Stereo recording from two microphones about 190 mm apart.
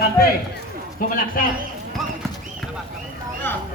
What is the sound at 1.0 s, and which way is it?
Speech, 45° left (ahead or behind).